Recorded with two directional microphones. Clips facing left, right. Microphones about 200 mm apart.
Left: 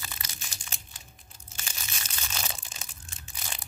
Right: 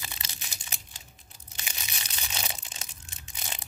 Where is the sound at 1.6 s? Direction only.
15° right (ahead or behind).